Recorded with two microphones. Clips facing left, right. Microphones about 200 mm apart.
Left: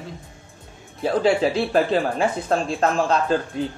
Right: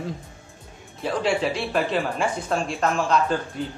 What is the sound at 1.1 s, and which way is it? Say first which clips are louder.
Speech: left 4 dB; 40° left (ahead or behind).